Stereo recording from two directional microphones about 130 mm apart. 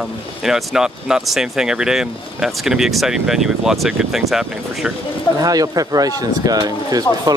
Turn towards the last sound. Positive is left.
turn(degrees=-30)  # may be behind; listen again after turning